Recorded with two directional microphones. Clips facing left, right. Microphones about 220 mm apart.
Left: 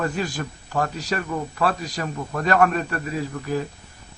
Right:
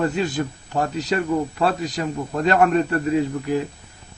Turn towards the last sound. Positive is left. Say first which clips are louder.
# right 5 dB
turn(degrees=-20)  # may be behind; listen again after turning